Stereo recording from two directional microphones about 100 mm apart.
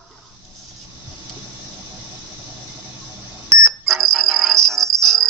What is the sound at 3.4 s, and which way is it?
Music, centre (ahead or behind).